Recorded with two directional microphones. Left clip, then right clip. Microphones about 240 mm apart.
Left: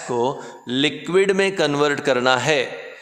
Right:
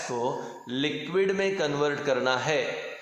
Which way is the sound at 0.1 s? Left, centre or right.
Left.